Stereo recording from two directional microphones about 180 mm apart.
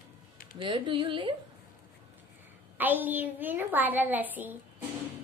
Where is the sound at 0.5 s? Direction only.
25° right (ahead or behind).